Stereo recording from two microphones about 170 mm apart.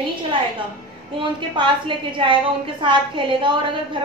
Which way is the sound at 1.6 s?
30° right (ahead or behind).